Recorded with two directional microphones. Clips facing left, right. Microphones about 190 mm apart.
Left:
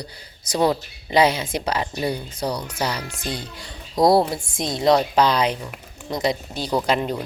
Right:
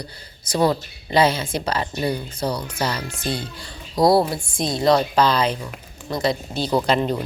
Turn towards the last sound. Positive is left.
turn(degrees=10)  # may be behind; listen again after turning